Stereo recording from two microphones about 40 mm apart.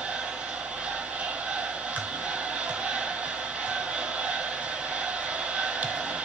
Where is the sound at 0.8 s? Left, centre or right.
Right.